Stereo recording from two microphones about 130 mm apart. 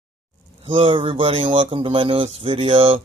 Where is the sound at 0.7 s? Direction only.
45° right (ahead or behind).